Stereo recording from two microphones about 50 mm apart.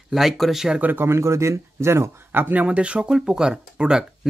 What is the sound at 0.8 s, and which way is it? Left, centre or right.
Speech, right.